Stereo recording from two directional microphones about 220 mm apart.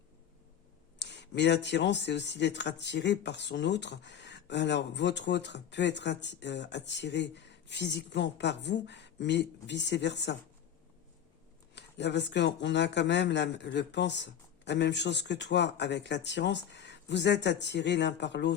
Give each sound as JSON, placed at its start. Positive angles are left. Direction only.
{"t": 0.9, "sound": "speech", "side_deg": 55}
{"t": 11.7, "sound": "speech", "side_deg": 50}